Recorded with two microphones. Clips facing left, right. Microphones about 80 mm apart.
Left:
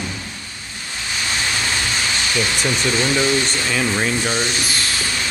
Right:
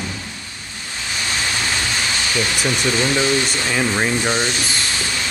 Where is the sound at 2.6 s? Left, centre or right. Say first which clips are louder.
Right 1 dB; centre.